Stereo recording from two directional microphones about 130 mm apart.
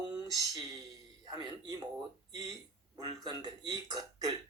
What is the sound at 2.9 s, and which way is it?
A man's voice, 35° right (ahead or behind).